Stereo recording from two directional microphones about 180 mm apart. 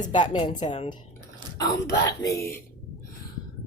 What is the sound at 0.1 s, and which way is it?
Speech, 25° left (ahead or behind).